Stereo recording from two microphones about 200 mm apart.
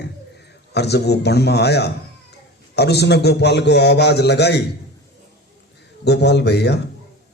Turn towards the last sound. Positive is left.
turn(degrees=55)  # may be behind; listen again after turning